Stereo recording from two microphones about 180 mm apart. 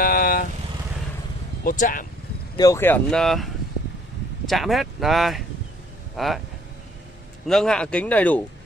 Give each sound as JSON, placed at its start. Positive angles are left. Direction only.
{"t": 0.0, "sound": "vehicle", "side_deg": 55}
{"t": 1.6, "sound": "speech", "side_deg": 50}
{"t": 2.5, "sound": "speech", "side_deg": 20}
{"t": 4.5, "sound": "speech", "side_deg": 0}
{"t": 7.4, "sound": "speech", "side_deg": 5}